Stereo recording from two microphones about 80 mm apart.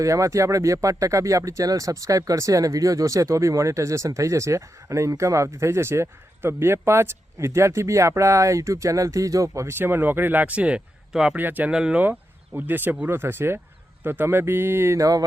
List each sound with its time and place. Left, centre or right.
0.0 s speech: right
9.7 s speech: right; by 11.3 s centre
11.3 s speech: right
11.7 s speech: centre
12.5 s speech: right